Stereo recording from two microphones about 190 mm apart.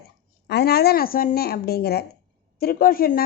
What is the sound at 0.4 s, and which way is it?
A woman's voice, 60° left (ahead or behind).